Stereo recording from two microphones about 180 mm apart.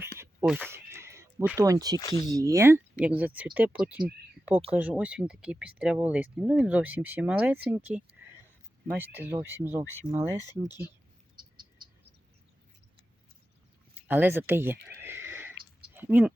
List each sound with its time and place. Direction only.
0.4 s speech: centre (ahead or behind)
0.7 s a sound: 15° right (ahead or behind)
2.0 s speech: 20° left (ahead or behind)
2.2 s speech: 20° right (ahead or behind)
14.1 s speech: 10° right (ahead or behind)
15.9 s a sound: 10° right (ahead or behind)